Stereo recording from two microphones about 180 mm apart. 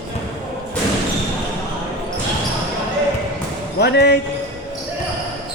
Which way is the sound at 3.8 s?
65° left (ahead or behind).